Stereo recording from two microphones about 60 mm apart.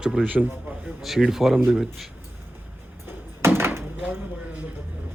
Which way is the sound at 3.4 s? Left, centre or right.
Right.